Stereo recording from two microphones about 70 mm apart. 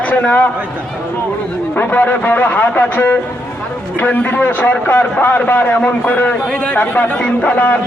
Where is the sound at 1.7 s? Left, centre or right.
Left.